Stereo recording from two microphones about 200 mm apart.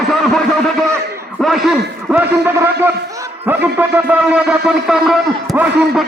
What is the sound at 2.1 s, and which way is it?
A man's voice, 10° right (ahead or behind).